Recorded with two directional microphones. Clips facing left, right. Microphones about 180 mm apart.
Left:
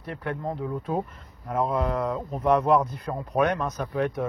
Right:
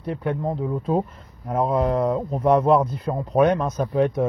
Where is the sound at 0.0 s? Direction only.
25° right (ahead or behind).